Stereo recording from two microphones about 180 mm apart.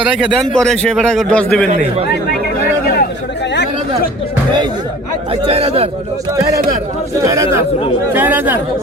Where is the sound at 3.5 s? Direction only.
70° left (ahead or behind).